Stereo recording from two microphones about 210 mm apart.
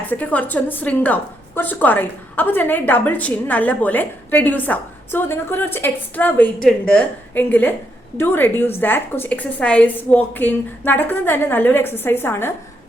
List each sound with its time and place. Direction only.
0.1 s a woman's voice: 5° left (ahead or behind)